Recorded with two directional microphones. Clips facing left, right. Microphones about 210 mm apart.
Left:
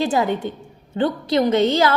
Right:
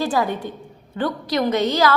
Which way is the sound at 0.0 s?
25° left (ahead or behind).